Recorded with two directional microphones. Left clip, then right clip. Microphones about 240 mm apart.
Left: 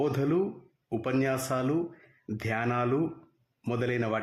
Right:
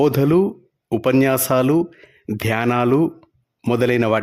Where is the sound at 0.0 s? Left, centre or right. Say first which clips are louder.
Right 12 dB; right.